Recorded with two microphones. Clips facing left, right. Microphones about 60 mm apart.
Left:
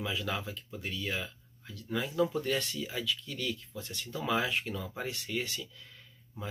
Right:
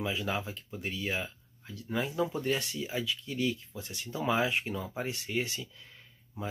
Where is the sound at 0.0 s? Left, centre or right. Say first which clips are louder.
Right 2 dB; right.